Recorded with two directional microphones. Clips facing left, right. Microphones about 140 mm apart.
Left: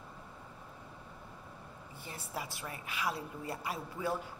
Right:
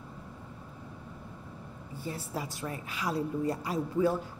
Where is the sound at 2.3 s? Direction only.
40° right (ahead or behind).